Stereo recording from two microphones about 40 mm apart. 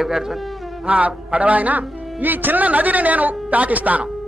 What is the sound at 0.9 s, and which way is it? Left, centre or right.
Speech, right.